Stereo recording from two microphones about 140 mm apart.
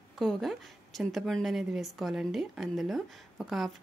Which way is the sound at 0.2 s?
Centre (ahead or behind).